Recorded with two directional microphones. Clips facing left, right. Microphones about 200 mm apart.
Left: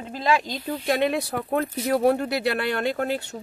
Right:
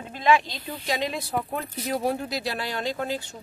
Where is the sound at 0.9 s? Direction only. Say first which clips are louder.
Left 5 dB; 60° left (ahead or behind).